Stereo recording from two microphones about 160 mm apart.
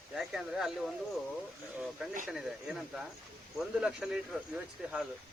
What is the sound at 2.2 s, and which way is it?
Speech, 5° right (ahead or behind).